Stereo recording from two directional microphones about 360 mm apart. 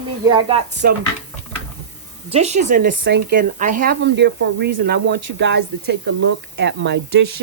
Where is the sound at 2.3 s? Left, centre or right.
Centre.